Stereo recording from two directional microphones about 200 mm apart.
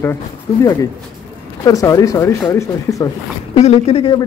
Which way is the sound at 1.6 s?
15° left (ahead or behind).